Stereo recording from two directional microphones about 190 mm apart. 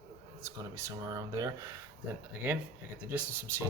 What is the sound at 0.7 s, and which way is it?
Speech, 15° right (ahead or behind).